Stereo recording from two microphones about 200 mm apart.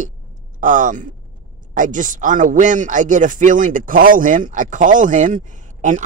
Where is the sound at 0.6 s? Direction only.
40° right (ahead or behind).